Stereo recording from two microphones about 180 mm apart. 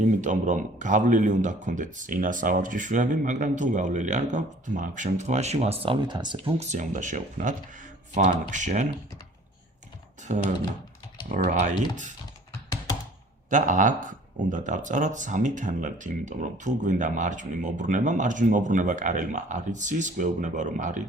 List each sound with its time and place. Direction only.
0.2 s speech: 45° right (ahead or behind)
10.2 s speech: 40° right (ahead or behind)
13.5 s speech: 45° right (ahead or behind)